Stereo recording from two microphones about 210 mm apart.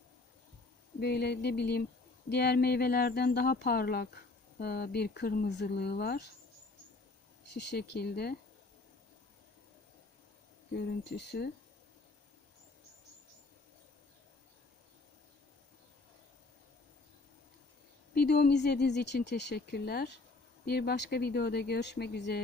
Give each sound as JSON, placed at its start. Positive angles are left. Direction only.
{"t": 0.9, "sound": "speech", "side_deg": 50}
{"t": 7.5, "sound": "speech", "side_deg": 50}
{"t": 11.1, "sound": "speech", "side_deg": 50}
{"t": 18.1, "sound": "speech", "side_deg": 50}